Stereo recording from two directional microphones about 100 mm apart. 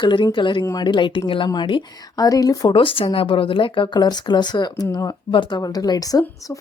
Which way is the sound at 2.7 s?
60° left (ahead or behind).